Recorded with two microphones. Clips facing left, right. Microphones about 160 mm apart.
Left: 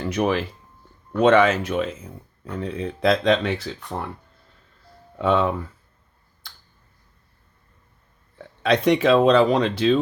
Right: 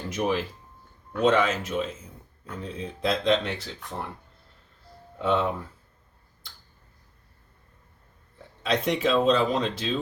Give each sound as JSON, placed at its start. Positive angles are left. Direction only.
{"t": 0.0, "sound": "speech", "side_deg": 75}
{"t": 5.1, "sound": "speech", "side_deg": 65}
{"t": 8.6, "sound": "speech", "side_deg": 70}